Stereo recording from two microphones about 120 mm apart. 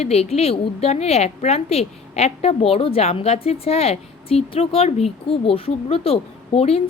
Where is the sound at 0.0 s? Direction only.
60° left (ahead or behind).